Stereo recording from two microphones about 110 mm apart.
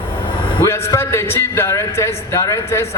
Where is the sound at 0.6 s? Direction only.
25° left (ahead or behind).